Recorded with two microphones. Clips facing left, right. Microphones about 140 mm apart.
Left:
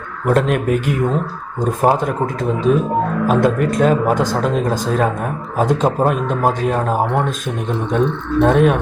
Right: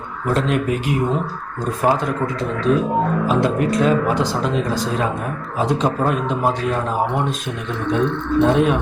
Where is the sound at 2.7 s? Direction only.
50° left (ahead or behind).